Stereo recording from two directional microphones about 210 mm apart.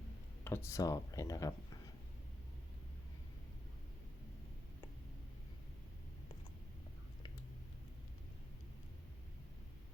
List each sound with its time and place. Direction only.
0.4 s speech: 10° left (ahead or behind)